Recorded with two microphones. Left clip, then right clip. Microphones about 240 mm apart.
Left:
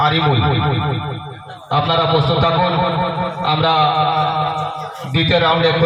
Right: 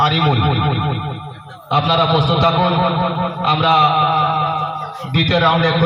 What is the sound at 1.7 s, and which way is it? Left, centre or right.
A man's voice, right.